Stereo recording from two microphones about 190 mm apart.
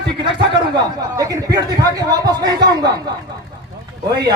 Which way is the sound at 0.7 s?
20° right (ahead or behind).